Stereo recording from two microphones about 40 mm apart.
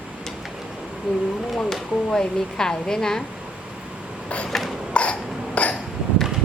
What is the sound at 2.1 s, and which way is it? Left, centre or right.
A woman's voice, centre.